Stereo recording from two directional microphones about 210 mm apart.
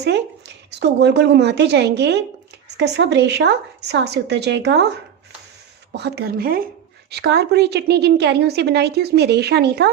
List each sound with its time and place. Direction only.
0.0 s a woman's voice: 55° right (ahead or behind)
5.9 s a woman's voice: 50° right (ahead or behind)